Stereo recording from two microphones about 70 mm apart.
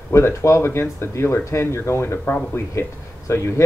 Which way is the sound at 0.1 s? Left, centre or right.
Left.